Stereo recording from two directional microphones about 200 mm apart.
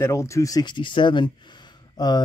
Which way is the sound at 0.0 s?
15° left (ahead or behind).